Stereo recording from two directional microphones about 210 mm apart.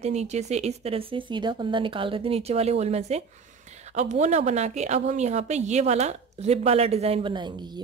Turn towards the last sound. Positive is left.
turn(degrees=-20)  # may be behind; listen again after turning